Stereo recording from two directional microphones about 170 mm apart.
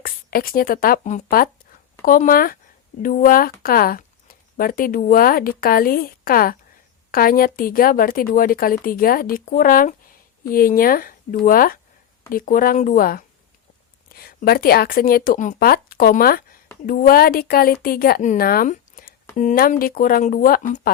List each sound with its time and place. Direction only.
0.0 s a woman's voice: 60° left (ahead or behind)